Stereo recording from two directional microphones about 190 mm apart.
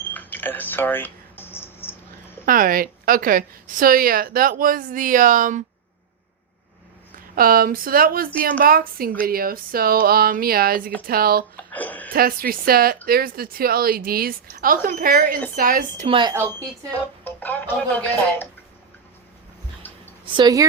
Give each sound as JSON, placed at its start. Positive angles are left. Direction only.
{"t": 0.1, "sound": "a sound", "side_deg": 10}
{"t": 2.5, "sound": "a woman's voice", "side_deg": -50}
{"t": 7.3, "sound": "a woman's voice", "side_deg": -50}
{"t": 11.7, "sound": "speech", "side_deg": 10}
{"t": 12.1, "sound": "a woman's voice", "side_deg": -50}
{"t": 16.0, "sound": "a woman's voice", "side_deg": -25}
{"t": 16.3, "sound": "speech", "side_deg": -15}
{"t": 16.9, "sound": "speech", "side_deg": 10}
{"t": 19.9, "sound": "a sound", "side_deg": 10}
{"t": 20.2, "sound": "a woman's voice", "side_deg": -25}